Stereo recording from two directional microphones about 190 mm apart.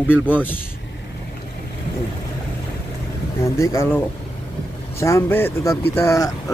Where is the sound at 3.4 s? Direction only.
15° left (ahead or behind).